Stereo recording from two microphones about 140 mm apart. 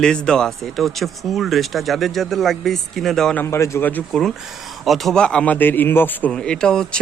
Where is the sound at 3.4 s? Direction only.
20° left (ahead or behind).